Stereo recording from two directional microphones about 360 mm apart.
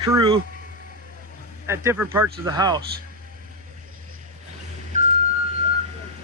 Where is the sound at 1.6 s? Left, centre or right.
Centre.